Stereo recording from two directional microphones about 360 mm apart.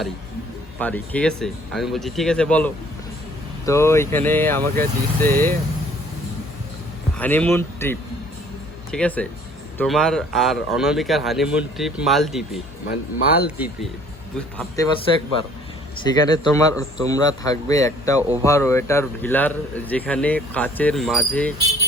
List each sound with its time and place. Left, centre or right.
0.8 s speech: centre
7.2 s speech: centre
12.9 s speech: left
14.3 s speech: centre
16.0 s a man's voice: centre